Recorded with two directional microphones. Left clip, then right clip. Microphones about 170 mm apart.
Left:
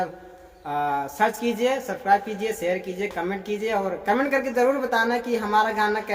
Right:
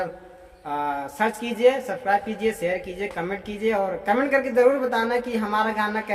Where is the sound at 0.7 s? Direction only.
20° left (ahead or behind).